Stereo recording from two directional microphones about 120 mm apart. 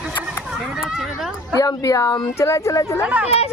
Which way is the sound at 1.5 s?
30° left (ahead or behind).